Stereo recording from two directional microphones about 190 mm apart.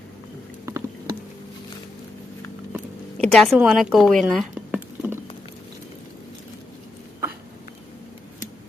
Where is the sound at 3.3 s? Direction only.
Centre (ahead or behind).